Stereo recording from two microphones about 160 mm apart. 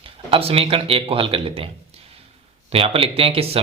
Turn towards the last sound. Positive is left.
turn(degrees=-40)  # may be behind; listen again after turning